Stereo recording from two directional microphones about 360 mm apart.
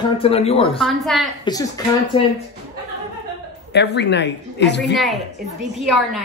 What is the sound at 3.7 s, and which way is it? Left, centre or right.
Speech, left.